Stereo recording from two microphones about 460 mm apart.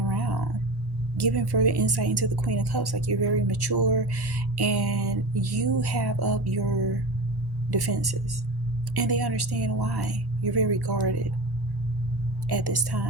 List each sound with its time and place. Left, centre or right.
0.1 s a sound: right
1.1 s speech: right
12.5 s speech: right